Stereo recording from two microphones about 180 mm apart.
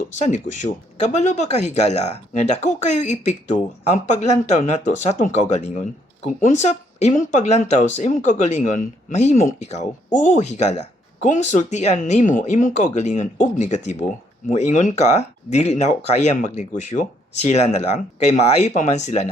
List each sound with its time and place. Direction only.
0.1 s speech: 45° left (ahead or behind)